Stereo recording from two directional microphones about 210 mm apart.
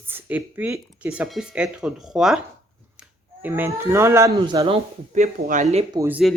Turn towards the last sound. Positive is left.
turn(degrees=-5)  # may be behind; listen again after turning